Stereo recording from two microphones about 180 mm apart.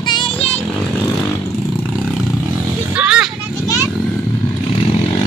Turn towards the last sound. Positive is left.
turn(degrees=-5)  # may be behind; listen again after turning